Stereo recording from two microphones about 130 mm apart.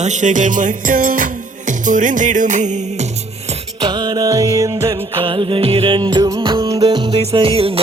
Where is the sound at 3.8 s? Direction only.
35° right (ahead or behind).